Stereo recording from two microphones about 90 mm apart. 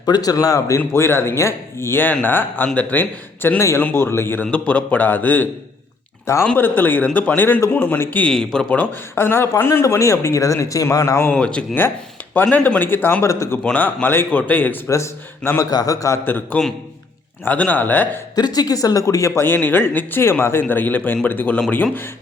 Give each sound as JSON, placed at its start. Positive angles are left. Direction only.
{"t": 0.0, "sound": "speech", "side_deg": 45}
{"t": 0.8, "sound": "a man's voice", "side_deg": 30}
{"t": 6.6, "sound": "a man's voice", "side_deg": 20}
{"t": 8.2, "sound": "speech", "side_deg": 5}
{"t": 11.3, "sound": "a man's voice", "side_deg": 10}
{"t": 13.7, "sound": "a man's voice", "side_deg": 20}
{"t": 14.8, "sound": "a man's voice", "side_deg": 30}
{"t": 18.3, "sound": "speech", "side_deg": 50}
{"t": 19.4, "sound": "a man's voice", "side_deg": 20}